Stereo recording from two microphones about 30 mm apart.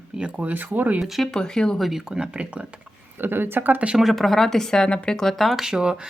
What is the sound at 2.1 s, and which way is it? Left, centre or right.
Speech, right.